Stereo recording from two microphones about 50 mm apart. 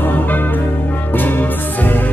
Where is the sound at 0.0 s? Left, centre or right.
Left.